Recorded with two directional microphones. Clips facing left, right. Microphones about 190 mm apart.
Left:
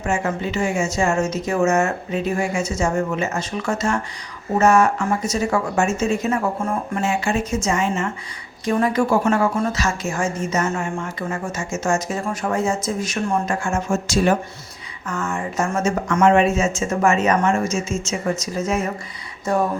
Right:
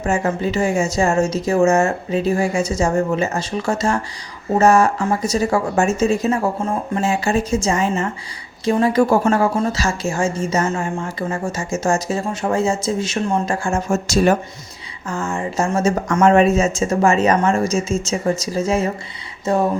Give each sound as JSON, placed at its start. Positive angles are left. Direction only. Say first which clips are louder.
{"t": 0.0, "sound": "a woman's voice", "louder": "right 3 dB", "side_deg": -35}
{"t": 15.0, "sound": "a woman's voice", "louder": "right 2 dB", "side_deg": -30}